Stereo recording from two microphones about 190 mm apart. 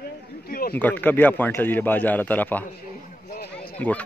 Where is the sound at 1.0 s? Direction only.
10° left (ahead or behind).